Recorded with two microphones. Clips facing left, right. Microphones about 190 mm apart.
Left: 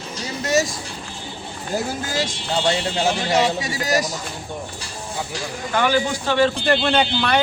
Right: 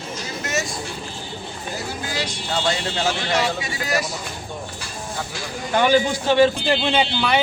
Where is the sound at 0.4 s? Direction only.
35° left (ahead or behind).